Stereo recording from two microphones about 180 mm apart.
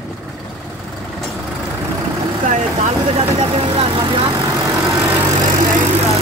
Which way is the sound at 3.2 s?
35° right (ahead or behind).